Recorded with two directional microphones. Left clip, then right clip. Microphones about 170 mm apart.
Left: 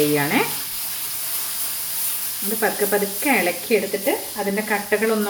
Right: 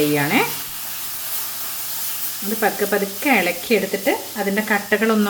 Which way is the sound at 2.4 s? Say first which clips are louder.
Right 1 dB; 15° right (ahead or behind).